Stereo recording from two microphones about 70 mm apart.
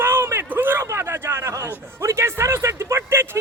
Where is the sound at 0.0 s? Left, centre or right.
Right.